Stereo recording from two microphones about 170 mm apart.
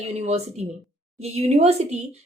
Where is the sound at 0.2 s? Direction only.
40° right (ahead or behind).